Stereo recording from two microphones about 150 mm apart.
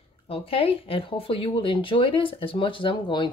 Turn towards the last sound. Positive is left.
turn(degrees=35)  # may be behind; listen again after turning